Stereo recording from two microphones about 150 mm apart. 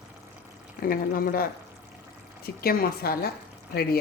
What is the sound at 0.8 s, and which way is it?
Speech, 70° left (ahead or behind).